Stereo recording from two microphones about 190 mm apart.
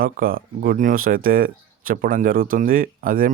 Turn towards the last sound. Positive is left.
turn(degrees=-50)  # may be behind; listen again after turning